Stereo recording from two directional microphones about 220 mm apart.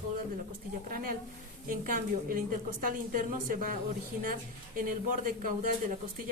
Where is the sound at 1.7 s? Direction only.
40° right (ahead or behind).